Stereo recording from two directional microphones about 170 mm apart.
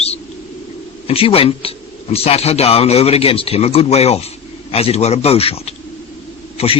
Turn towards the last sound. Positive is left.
turn(degrees=35)  # may be behind; listen again after turning